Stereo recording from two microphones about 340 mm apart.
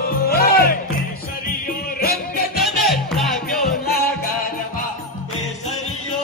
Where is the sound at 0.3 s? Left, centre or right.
Left.